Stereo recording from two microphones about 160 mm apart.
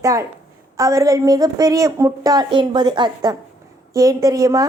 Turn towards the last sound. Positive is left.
turn(degrees=-20)  # may be behind; listen again after turning